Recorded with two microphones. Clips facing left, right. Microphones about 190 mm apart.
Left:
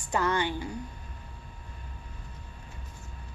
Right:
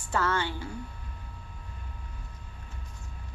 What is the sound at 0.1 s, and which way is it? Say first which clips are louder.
Speech: left 1 dB; 15° left (ahead or behind).